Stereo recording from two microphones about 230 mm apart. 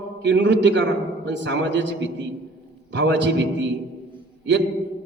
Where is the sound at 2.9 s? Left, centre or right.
Right.